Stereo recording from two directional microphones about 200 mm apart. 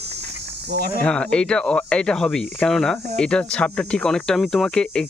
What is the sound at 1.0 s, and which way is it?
Speech, 5° left (ahead or behind).